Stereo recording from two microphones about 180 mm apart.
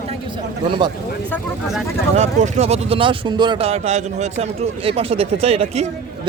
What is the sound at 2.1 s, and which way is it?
A man's voice, 40° right (ahead or behind).